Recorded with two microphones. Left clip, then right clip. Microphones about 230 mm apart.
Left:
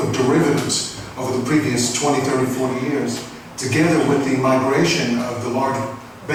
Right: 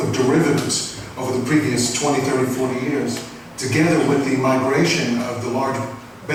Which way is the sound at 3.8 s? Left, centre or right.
Centre.